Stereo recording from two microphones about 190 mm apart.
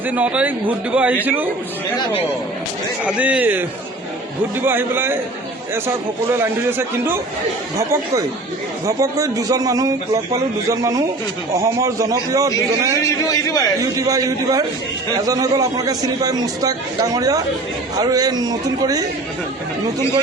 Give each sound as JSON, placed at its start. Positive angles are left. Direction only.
{"t": 0.1, "sound": "a man's voice", "side_deg": -5}
{"t": 3.0, "sound": "a man's voice", "side_deg": -5}
{"t": 6.4, "sound": "a man's voice", "side_deg": -10}
{"t": 13.0, "sound": "a man's voice", "side_deg": 15}
{"t": 13.9, "sound": "a man's voice", "side_deg": -15}